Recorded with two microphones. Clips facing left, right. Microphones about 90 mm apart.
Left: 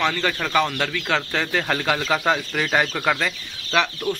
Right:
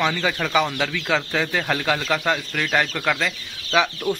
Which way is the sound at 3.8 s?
10° right (ahead or behind).